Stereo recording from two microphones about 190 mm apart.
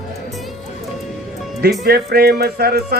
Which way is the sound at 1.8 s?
55° right (ahead or behind).